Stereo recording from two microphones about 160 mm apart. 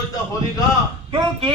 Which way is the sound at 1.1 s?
30° right (ahead or behind).